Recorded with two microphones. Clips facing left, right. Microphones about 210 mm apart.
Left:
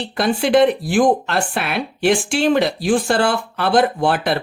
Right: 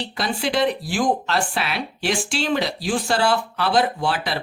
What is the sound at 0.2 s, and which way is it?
Speech, 55° left (ahead or behind).